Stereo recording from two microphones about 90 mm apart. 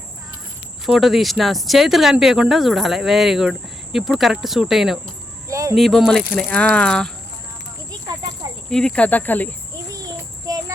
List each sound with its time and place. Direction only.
0.9 s speech: centre (ahead or behind)
5.5 s cricket: 35° right (ahead or behind)
5.7 s speech: centre (ahead or behind)
8.7 s speech: 10° left (ahead or behind)
9.9 s child singing: 45° right (ahead or behind)